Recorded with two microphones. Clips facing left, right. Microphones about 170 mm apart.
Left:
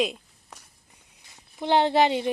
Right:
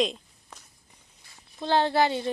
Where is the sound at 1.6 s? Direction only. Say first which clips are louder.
Left 2 dB; 15° left (ahead or behind).